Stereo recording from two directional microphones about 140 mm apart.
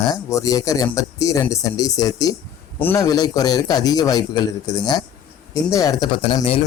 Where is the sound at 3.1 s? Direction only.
25° left (ahead or behind).